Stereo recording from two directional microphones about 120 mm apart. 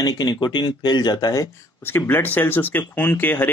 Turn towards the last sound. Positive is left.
turn(degrees=15)  # may be behind; listen again after turning